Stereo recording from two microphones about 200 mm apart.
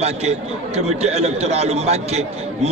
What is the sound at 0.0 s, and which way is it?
A man's voice, 35° right (ahead or behind).